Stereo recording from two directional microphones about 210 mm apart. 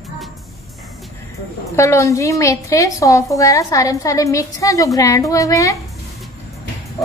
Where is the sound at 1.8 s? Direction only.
15° left (ahead or behind).